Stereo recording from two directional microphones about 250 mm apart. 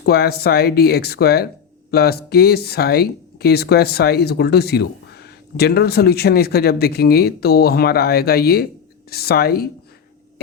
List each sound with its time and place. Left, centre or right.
0.0 s speech: left